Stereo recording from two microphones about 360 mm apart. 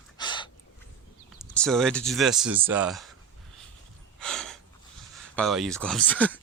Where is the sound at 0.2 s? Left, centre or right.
Centre.